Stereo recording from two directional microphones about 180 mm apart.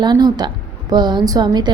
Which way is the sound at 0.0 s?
25° right (ahead or behind).